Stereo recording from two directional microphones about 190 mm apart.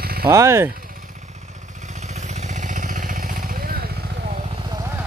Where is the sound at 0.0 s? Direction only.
55° right (ahead or behind).